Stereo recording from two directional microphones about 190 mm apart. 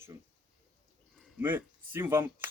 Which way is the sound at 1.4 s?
10° right (ahead or behind).